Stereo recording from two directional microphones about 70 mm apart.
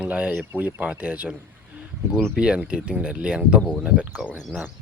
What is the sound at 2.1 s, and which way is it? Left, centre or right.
Speech, centre.